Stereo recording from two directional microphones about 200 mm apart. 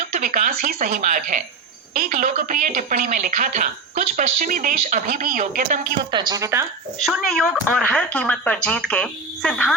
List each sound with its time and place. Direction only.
0.1 s speech: 40° right (ahead or behind)
6.1 s a woman's voice: 20° right (ahead or behind)
7.3 s speech: centre (ahead or behind)